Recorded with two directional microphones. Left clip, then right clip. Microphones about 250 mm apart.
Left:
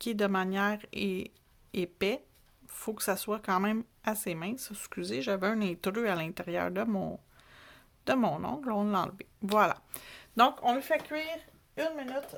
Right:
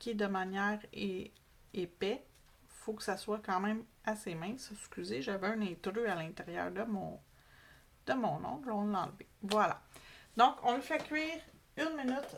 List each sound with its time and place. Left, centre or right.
0.0 s speech: left